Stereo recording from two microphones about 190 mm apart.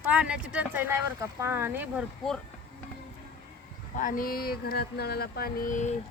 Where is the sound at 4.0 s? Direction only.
45° left (ahead or behind).